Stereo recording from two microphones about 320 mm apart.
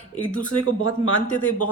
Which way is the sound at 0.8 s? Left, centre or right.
Left.